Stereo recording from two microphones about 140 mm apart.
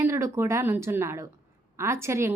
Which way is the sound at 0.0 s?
20° right (ahead or behind).